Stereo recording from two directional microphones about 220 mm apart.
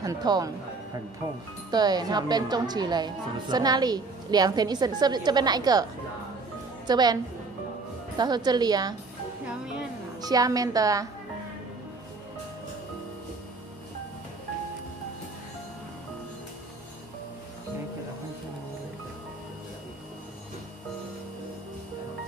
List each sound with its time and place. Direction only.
0.0 s a woman's voice: 15° right (ahead or behind)
1.7 s speech: 20° right (ahead or behind)
6.9 s speech: 20° right (ahead or behind)
8.2 s speech: 20° right (ahead or behind)
10.2 s a woman's voice: 15° right (ahead or behind)